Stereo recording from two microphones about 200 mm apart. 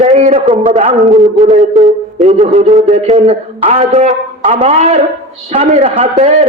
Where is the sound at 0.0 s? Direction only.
35° right (ahead or behind).